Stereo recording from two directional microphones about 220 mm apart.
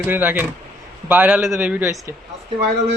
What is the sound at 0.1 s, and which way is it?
A man's voice, 10° right (ahead or behind).